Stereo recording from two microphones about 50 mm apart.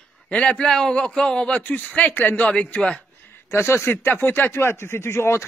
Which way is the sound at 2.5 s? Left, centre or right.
Left.